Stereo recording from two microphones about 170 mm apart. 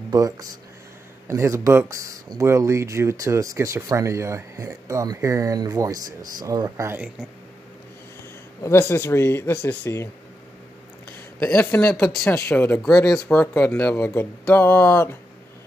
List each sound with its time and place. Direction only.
0.1 s speech: 20° right (ahead or behind)
8.6 s speech: 15° left (ahead or behind)
11.3 s speech: 5° left (ahead or behind)
12.3 s speech: 15° left (ahead or behind)